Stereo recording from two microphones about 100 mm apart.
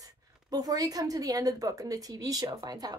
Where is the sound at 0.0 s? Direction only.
40° right (ahead or behind).